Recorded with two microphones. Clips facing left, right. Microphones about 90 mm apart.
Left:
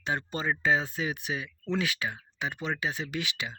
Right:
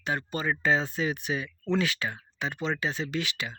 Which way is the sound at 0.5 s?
10° left (ahead or behind).